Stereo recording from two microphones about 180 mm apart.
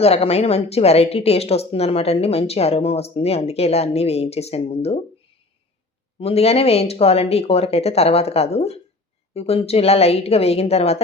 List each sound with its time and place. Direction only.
0.0 s a woman's voice: 35° left (ahead or behind)
6.1 s a woman's voice: 35° left (ahead or behind)